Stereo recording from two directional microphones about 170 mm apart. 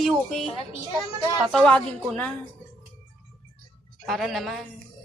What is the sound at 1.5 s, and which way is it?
Speech, 5° left (ahead or behind).